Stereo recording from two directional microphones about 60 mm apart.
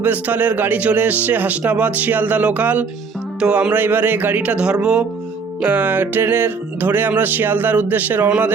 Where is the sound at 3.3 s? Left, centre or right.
Centre.